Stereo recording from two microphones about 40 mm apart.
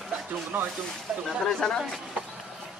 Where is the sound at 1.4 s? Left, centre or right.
Centre.